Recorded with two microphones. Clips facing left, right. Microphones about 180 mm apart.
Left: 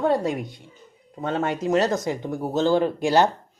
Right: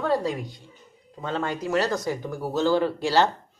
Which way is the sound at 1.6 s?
20° left (ahead or behind).